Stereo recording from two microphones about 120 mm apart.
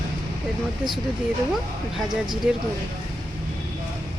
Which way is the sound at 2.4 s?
10° right (ahead or behind).